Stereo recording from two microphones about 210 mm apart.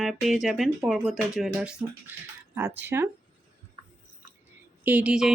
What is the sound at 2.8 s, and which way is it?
Speech, 10° right (ahead or behind).